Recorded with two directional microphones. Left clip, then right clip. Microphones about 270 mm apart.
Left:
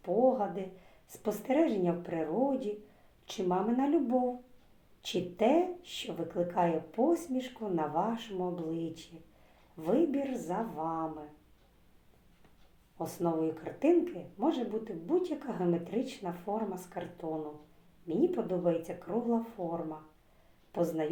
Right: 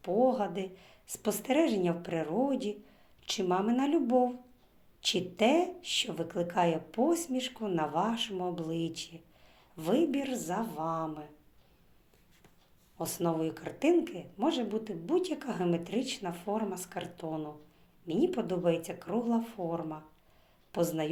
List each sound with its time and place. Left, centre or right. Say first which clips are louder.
0.0 s speech: even; right
10.5 s speech: right 2 dB; right
13.0 s speech: even; right